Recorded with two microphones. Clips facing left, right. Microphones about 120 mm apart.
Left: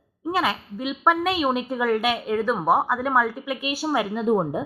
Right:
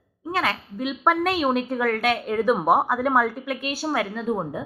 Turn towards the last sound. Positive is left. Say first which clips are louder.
# left 5 dB
turn(degrees=20)  # may be behind; listen again after turning